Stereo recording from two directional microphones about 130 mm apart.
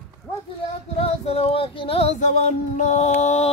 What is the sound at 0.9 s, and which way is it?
Female singing, 50° left (ahead or behind).